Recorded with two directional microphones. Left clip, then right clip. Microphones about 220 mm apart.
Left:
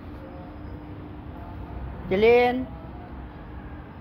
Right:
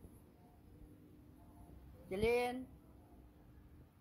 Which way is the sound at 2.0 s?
25° right (ahead or behind).